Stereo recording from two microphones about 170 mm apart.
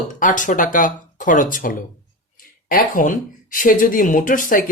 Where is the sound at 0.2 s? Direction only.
50° left (ahead or behind).